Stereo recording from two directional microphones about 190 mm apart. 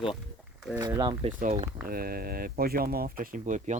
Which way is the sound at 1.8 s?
50° right (ahead or behind).